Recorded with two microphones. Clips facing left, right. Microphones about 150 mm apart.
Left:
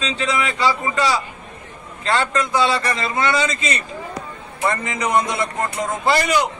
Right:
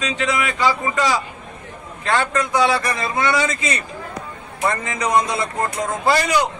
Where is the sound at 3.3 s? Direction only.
25° left (ahead or behind).